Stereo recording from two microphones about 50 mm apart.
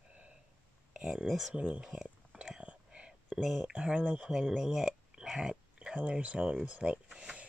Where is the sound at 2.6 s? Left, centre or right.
Right.